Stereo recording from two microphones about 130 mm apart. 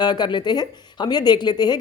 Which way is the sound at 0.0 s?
35° left (ahead or behind).